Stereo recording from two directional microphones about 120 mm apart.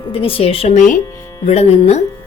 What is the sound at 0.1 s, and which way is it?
Speech, 50° left (ahead or behind).